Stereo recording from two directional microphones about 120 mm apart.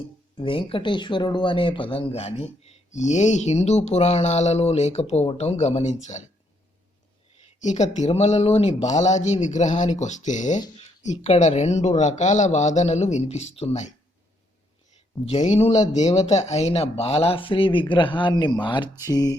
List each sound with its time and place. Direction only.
0.3 s speech: 45° left (ahead or behind); by 6.2 s 75° left (ahead or behind)
7.6 s speech: 80° left
11.0 s speech: 75° left (ahead or behind)
15.3 s speech: 65° left (ahead or behind); by 19.4 s 30° left (ahead or behind)